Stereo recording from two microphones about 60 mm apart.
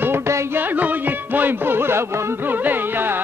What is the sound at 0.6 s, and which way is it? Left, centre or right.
Music, right.